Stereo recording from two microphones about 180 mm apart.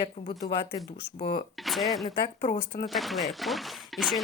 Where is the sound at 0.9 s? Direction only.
65° left (ahead or behind).